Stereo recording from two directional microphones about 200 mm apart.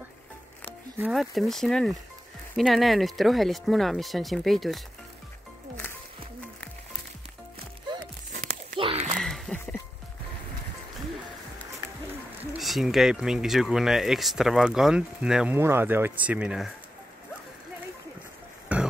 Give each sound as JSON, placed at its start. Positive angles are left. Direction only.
{"t": 0.9, "sound": "speech", "side_deg": -5}
{"t": 8.3, "sound": "crumpling", "side_deg": -55}
{"t": 8.7, "sound": "a sound", "side_deg": -30}
{"t": 9.2, "sound": "music", "side_deg": 5}
{"t": 12.5, "sound": "speech", "side_deg": 0}
{"t": 18.7, "sound": "music", "side_deg": -5}